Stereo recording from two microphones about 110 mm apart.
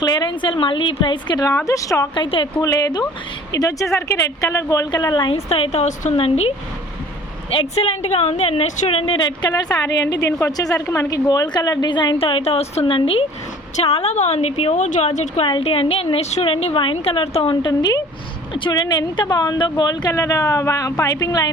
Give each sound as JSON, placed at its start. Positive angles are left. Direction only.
{"t": 0.0, "sound": "a woman's voice", "side_deg": 40}
{"t": 1.5, "sound": "a woman's voice", "side_deg": 30}
{"t": 2.1, "sound": "a woman's voice", "side_deg": 50}
{"t": 2.6, "sound": "a woman's voice", "side_deg": 30}
{"t": 5.5, "sound": "a woman's voice", "side_deg": 60}
{"t": 5.8, "sound": "a woman's voice", "side_deg": 75}
{"t": 7.5, "sound": "a woman's voice", "side_deg": 65}
{"t": 12.8, "sound": "a woman's voice", "side_deg": 60}
{"t": 15.4, "sound": "a woman's voice", "side_deg": 55}